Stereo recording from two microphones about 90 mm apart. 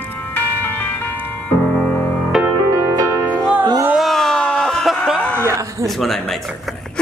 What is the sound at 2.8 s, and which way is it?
Music, 40° right (ahead or behind).